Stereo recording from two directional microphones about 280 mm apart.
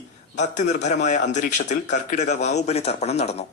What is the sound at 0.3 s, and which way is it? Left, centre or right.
A man's voice, left.